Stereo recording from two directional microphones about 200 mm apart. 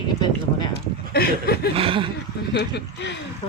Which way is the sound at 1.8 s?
30° right (ahead or behind).